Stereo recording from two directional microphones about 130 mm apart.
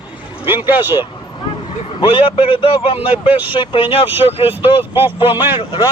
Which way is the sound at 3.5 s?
40° left (ahead or behind).